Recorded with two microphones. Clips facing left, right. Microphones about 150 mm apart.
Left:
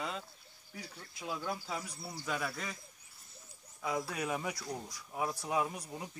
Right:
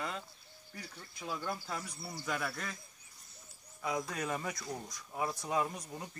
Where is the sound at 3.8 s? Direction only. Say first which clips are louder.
Even; centre (ahead or behind).